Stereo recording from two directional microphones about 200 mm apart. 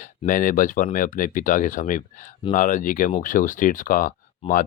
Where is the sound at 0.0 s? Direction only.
40° left (ahead or behind).